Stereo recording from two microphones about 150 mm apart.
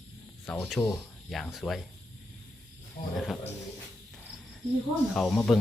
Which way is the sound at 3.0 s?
55° left (ahead or behind).